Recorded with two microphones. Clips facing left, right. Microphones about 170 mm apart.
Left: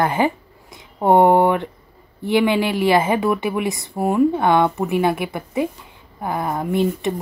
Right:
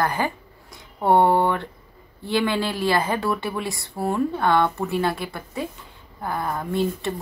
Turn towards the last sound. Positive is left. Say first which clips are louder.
# left 4 dB
turn(degrees=20)  # may be behind; listen again after turning